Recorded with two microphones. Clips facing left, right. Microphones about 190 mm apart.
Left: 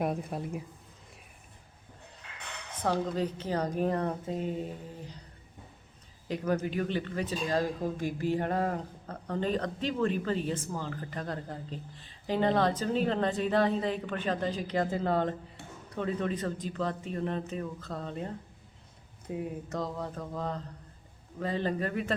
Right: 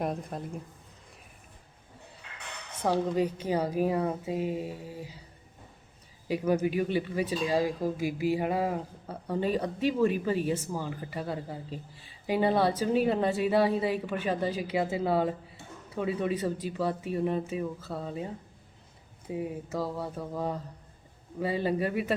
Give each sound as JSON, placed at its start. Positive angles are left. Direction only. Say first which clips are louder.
{"t": 0.0, "sound": "speech", "louder": "left 1 dB", "side_deg": 5}
{"t": 2.8, "sound": "speech", "louder": "right 3 dB", "side_deg": -10}
{"t": 6.2, "sound": "speech", "louder": "right 4 dB", "side_deg": -10}